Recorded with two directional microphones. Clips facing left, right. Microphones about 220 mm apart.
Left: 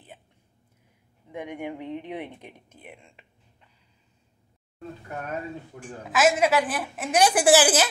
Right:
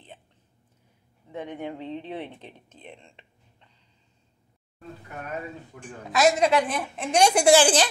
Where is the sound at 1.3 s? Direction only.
15° left (ahead or behind).